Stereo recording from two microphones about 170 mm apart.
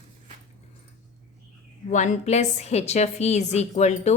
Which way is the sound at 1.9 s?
45° left (ahead or behind).